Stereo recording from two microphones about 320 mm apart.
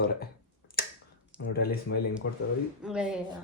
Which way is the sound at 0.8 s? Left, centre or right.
Left.